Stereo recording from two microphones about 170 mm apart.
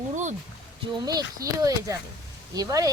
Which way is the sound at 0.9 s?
25° right (ahead or behind).